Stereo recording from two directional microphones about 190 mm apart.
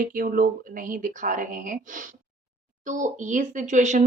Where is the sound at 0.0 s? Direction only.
45° right (ahead or behind).